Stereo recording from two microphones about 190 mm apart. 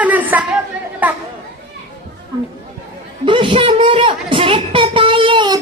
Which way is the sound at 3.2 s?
25° right (ahead or behind).